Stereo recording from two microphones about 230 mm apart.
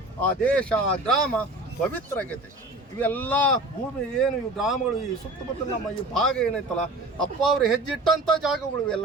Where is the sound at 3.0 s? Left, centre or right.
Centre.